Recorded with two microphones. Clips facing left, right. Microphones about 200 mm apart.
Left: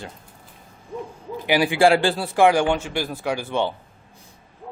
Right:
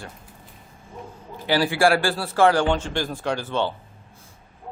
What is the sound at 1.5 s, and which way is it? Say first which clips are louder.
Speech: left 2 dB; 15° left (ahead or behind).